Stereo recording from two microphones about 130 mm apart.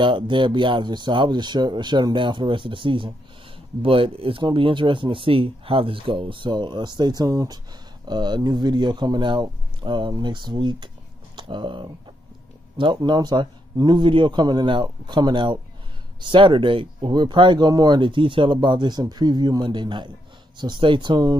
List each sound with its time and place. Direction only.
0.0 s speech: 40° right (ahead or behind)